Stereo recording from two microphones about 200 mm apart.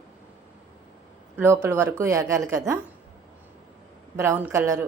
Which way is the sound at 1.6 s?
10° right (ahead or behind).